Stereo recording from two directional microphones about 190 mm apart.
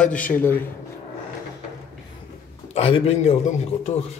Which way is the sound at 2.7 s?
30° left (ahead or behind).